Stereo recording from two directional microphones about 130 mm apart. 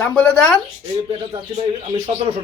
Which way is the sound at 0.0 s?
10° left (ahead or behind).